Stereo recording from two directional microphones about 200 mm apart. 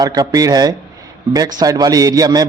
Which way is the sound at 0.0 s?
20° right (ahead or behind).